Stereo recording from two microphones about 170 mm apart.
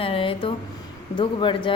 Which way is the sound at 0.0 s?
30° left (ahead or behind).